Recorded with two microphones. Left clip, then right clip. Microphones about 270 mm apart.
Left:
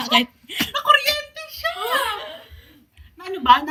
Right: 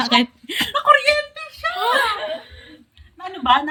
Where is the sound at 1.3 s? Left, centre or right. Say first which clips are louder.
Right 2 dB; centre.